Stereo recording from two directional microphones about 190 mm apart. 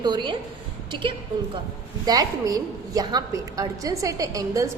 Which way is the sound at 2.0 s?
20° right (ahead or behind).